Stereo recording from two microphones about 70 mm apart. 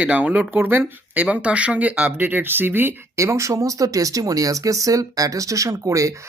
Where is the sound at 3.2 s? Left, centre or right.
Right.